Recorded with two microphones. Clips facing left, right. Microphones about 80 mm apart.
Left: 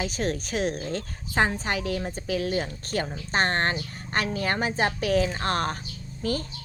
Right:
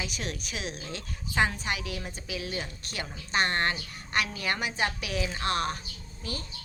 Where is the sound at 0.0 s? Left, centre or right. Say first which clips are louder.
Left 8 dB; left.